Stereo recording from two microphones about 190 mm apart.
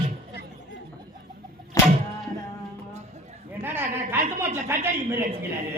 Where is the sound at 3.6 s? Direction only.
10° right (ahead or behind).